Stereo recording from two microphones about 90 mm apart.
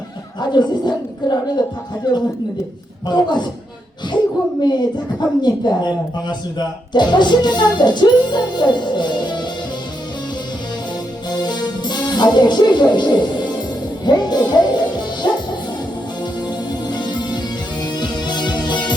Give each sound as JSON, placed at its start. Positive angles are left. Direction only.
{"t": 0.5, "sound": "a woman's voice", "side_deg": 55}
{"t": 4.6, "sound": "a woman's voice", "side_deg": 55}
{"t": 11.3, "sound": "music", "side_deg": 50}
{"t": 16.9, "sound": "music", "side_deg": 55}